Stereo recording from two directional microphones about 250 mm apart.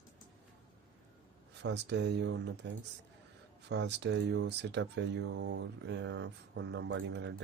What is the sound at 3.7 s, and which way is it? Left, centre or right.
Speech, right.